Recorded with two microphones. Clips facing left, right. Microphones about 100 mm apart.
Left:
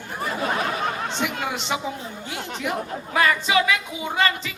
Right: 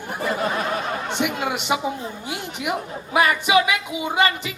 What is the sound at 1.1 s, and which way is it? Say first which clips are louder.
Speech: right 3 dB; 15° right (ahead or behind).